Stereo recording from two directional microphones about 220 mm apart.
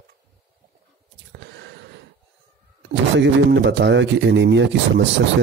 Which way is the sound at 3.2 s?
55° right (ahead or behind).